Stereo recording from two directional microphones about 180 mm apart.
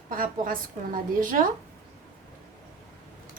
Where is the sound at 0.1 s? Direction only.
50° right (ahead or behind).